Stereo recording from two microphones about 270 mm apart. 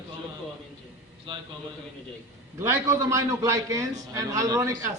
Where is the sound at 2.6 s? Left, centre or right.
Centre.